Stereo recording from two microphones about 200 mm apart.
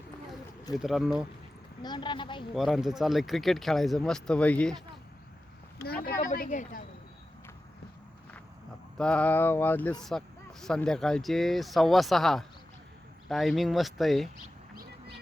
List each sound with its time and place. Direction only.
0.8 s speech: centre (ahead or behind)
1.8 s a woman's voice: 20° left (ahead or behind)
2.6 s speech: centre (ahead or behind)
5.8 s speech: 50° left (ahead or behind)
9.0 s a sound: 5° left (ahead or behind)
10.0 s speech: centre (ahead or behind)